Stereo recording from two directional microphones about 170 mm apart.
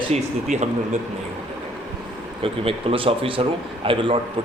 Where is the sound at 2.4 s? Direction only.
30° right (ahead or behind).